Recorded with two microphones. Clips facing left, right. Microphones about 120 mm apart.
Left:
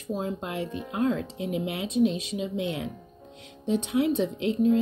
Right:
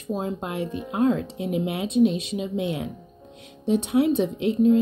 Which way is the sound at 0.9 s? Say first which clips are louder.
Right 4 dB; 25° right (ahead or behind).